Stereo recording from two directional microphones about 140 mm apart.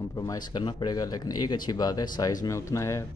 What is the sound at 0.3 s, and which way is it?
Speech, 35° left (ahead or behind).